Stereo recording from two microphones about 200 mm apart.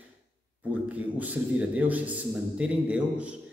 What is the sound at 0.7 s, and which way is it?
Speech, 5° right (ahead or behind).